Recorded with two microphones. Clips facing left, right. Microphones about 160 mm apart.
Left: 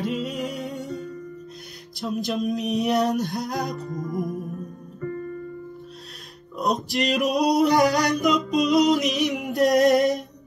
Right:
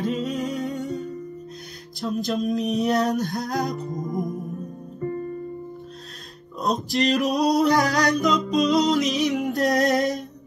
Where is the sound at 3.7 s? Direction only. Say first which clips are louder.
Right 1 dB; 20° right (ahead or behind).